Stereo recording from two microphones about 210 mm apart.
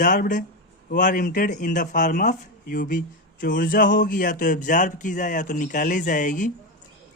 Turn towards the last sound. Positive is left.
turn(degrees=40)  # may be behind; listen again after turning